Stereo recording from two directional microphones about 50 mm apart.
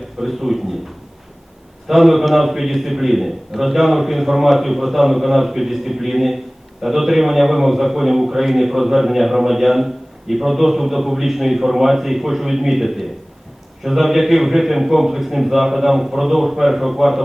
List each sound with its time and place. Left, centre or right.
0.2 s a man's voice: centre
1.9 s a man's voice: centre